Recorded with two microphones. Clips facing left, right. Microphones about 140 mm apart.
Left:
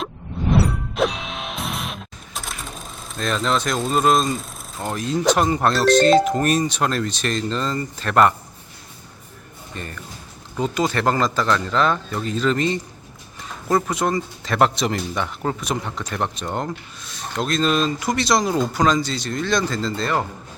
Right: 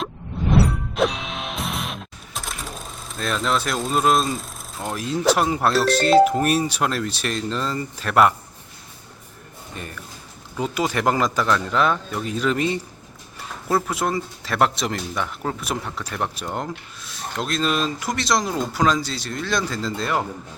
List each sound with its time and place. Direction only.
0.5 s music: centre (ahead or behind)
9.7 s speech: 5° right (ahead or behind)